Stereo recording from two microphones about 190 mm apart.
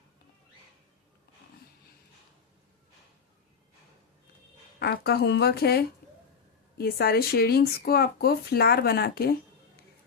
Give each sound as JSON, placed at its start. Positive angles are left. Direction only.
{"t": 4.8, "sound": "speech", "side_deg": 60}